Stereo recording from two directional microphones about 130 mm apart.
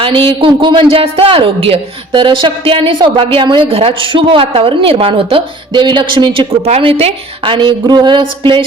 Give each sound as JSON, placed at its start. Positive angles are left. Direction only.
{"t": 0.0, "sound": "a woman's voice", "side_deg": -40}